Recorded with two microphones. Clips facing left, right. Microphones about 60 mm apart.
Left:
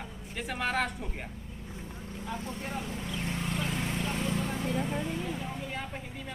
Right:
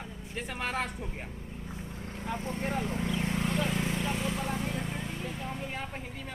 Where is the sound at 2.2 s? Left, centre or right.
Right.